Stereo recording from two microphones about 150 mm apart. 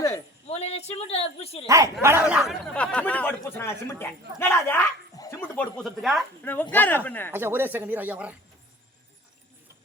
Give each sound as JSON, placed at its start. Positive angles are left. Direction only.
{"t": 0.4, "sound": "speech", "side_deg": 45}
{"t": 1.6, "sound": "speech", "side_deg": -20}
{"t": 2.7, "sound": "speech", "side_deg": 10}
{"t": 6.4, "sound": "speech", "side_deg": 15}
{"t": 7.3, "sound": "speech", "side_deg": -15}